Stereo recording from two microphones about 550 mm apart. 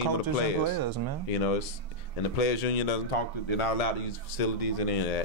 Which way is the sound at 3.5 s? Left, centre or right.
Left.